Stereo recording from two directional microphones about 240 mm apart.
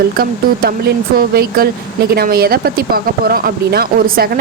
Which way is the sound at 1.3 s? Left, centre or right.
Right.